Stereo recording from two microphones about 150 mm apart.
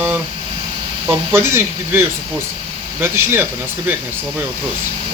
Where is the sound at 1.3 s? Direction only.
15° right (ahead or behind).